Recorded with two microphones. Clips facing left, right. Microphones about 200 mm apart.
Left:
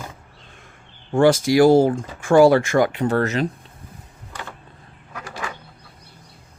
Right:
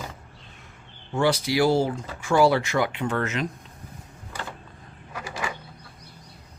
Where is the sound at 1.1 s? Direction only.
45° left (ahead or behind).